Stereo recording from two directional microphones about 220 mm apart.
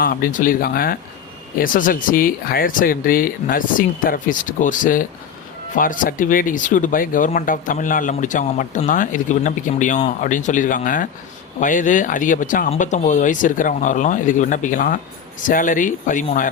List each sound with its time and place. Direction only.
0.0 s speech: 40° left (ahead or behind)